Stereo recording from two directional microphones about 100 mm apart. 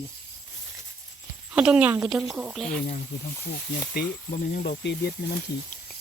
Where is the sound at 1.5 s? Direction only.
10° right (ahead or behind); by 2.8 s 5° left (ahead or behind).